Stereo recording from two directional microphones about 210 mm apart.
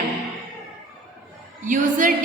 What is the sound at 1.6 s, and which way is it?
Speech, 40° right (ahead or behind).